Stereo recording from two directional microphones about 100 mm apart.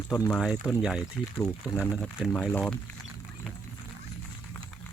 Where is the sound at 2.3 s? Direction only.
15° left (ahead or behind).